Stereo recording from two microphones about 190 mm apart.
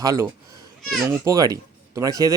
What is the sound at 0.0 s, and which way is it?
Speech, 20° right (ahead or behind).